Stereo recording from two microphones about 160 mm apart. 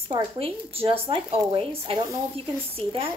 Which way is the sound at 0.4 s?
35° right (ahead or behind).